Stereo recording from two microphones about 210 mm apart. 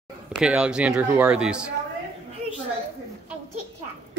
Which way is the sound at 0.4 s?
5° right (ahead or behind).